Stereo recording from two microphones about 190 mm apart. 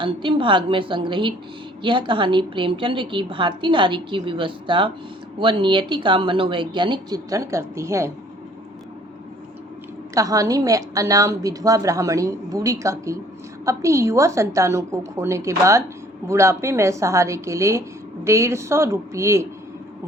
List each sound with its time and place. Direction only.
0.0 s a woman's voice: 25° right (ahead or behind)
10.2 s a woman's voice: 15° right (ahead or behind)